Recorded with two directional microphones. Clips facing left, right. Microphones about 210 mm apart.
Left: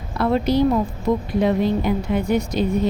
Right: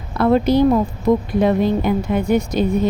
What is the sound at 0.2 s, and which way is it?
A woman's voice, 55° right (ahead or behind).